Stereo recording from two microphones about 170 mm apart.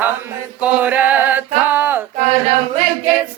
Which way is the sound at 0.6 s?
10° right (ahead or behind).